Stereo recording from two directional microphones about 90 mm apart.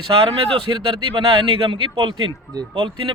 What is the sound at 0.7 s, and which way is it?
Speech, 75° right (ahead or behind).